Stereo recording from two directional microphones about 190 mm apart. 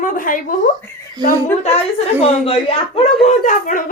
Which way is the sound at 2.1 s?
30° left (ahead or behind).